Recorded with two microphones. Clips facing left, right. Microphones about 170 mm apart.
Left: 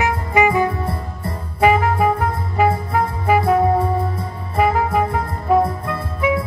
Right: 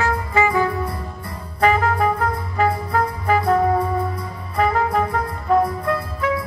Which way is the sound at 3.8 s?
25° left (ahead or behind).